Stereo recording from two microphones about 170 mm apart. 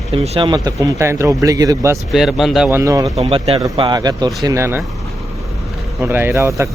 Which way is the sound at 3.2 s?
35° right (ahead or behind).